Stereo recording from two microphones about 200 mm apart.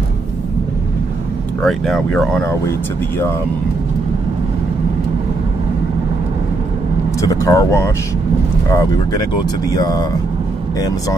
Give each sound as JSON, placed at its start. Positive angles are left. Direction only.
{"t": 1.6, "sound": "speech", "side_deg": 0}
{"t": 7.2, "sound": "speech", "side_deg": 15}